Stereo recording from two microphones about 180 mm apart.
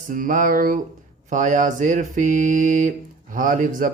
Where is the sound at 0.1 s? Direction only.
45° right (ahead or behind).